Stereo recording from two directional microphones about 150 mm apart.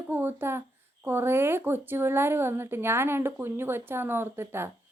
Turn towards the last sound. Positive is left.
turn(degrees=-15)  # may be behind; listen again after turning